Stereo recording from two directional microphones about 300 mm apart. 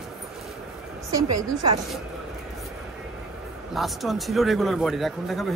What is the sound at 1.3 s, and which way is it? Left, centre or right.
Speech, centre.